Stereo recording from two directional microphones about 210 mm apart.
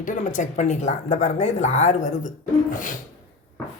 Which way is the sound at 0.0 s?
35° left (ahead or behind).